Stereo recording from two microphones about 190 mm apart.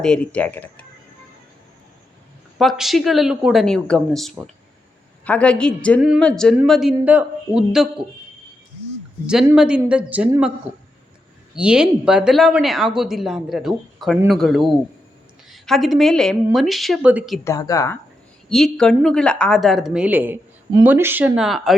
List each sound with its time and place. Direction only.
0.0 s a woman's voice: 5° left (ahead or behind)
2.6 s a woman's voice: centre (ahead or behind)
9.2 s speech: 5° right (ahead or behind)
11.5 s speech: 5° right (ahead or behind)
17.4 s a woman's voice: 15° left (ahead or behind)
18.4 s speech: centre (ahead or behind)